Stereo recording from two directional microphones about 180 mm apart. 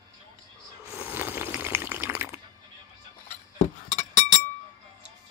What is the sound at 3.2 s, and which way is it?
Glass, 40° left (ahead or behind).